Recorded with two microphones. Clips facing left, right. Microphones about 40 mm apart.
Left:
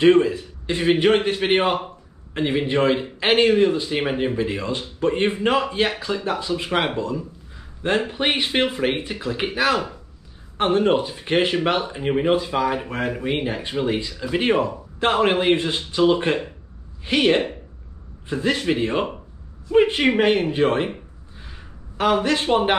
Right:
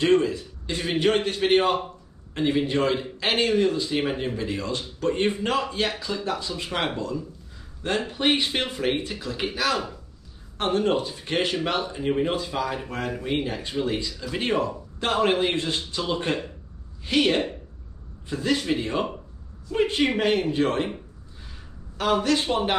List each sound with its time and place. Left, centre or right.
0.0 s a man's voice: centre